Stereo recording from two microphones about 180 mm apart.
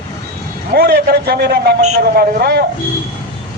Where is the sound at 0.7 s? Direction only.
60° right (ahead or behind).